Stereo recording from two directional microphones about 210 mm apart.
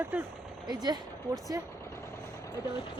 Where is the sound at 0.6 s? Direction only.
20° right (ahead or behind).